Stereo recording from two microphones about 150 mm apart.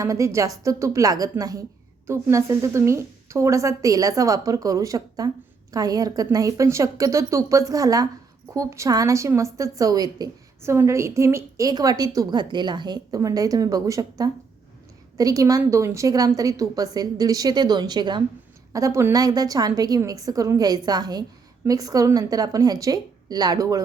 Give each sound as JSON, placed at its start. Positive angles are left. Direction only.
{"t": 0.0, "sound": "a woman's voice", "side_deg": -20}